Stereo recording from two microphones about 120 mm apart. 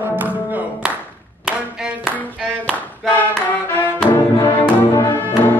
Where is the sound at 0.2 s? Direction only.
15° right (ahead or behind).